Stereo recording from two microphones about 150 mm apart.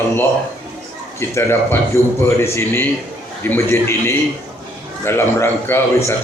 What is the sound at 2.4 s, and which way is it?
A man's voice, 15° left (ahead or behind).